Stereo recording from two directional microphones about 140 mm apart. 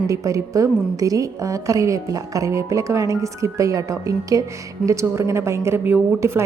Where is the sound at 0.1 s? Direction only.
25° right (ahead or behind).